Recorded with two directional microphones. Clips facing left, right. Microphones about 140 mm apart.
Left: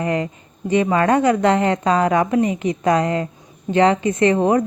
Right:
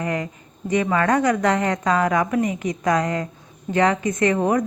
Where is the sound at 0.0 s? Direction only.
30° left (ahead or behind).